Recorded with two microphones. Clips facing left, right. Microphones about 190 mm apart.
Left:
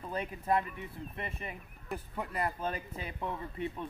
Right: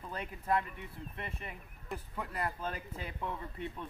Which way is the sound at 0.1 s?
20° left (ahead or behind).